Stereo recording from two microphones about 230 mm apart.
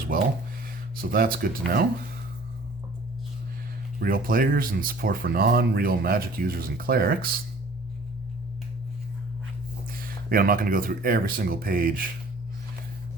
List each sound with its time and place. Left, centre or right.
0.9 s speech: right
4.0 s speech: right
9.9 s speech: right